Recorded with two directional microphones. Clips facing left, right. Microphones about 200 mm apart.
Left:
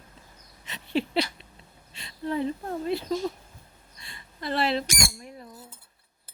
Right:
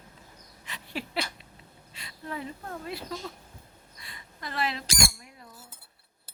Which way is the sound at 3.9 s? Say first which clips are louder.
Left 4 dB; 30° left (ahead or behind).